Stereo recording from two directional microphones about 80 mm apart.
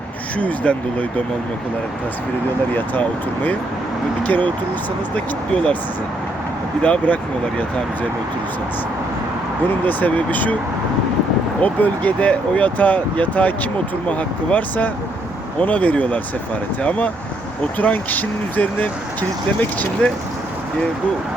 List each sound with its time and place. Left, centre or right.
0.3 s speech: centre
2.7 s speech: left
6.8 s speech: centre
9.8 s speech: left
11.6 s speech: centre
17.7 s speech: centre
20.0 s speech: centre